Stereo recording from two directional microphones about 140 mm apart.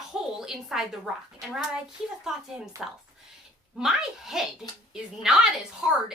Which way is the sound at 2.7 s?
20° right (ahead or behind).